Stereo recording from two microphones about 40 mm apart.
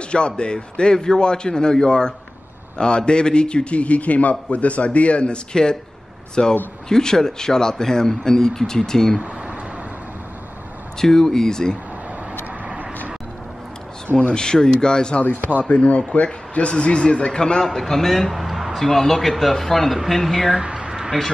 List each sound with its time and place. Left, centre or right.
0.1 s a man's voice: left
11.0 s speech: centre
14.3 s a man's voice: centre
18.8 s speech: centre
20.5 s a sound: right